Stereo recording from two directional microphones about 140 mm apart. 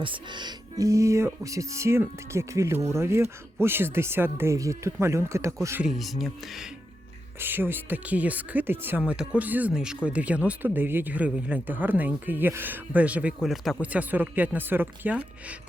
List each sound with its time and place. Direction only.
0.0 s speech: 35° right (ahead or behind)
5.8 s speech: centre (ahead or behind)
7.3 s speech: 15° right (ahead or behind)